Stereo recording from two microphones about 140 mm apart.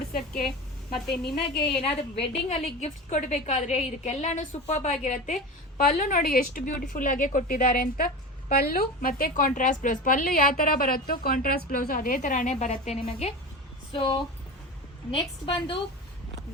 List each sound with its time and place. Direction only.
0.9 s a woman's voice: 5° left (ahead or behind)
1.8 s a woman's voice: 45° left (ahead or behind); by 6.8 s 90° left
6.9 s a woman's voice: 70° left (ahead or behind); by 15.7 s 40° left (ahead or behind)